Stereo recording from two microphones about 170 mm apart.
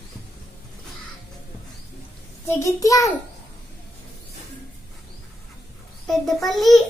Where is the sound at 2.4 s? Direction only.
20° left (ahead or behind).